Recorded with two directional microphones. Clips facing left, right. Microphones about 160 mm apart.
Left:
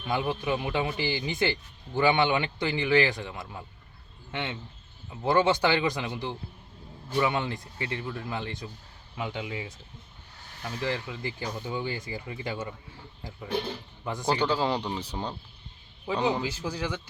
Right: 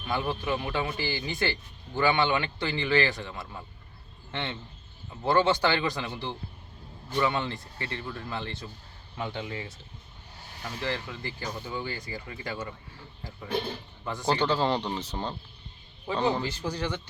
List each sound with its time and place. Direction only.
0.1 s a man's voice: 15° left (ahead or behind)
14.0 s a man's voice: 15° left (ahead or behind)